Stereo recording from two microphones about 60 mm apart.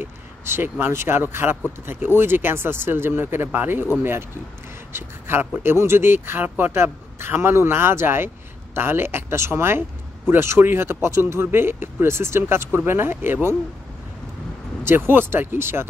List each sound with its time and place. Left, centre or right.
0.0 s speech: right
4.9 s speech: right
14.9 s speech: right